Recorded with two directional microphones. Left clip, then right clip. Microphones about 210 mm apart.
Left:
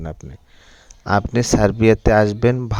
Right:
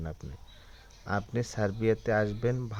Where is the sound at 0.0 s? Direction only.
45° left (ahead or behind).